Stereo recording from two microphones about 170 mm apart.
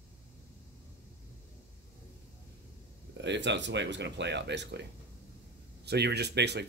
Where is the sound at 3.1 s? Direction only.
90° right.